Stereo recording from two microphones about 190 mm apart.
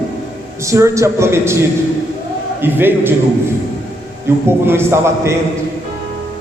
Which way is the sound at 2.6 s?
10° right (ahead or behind).